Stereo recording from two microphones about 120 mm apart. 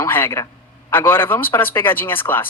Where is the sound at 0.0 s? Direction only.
20° left (ahead or behind).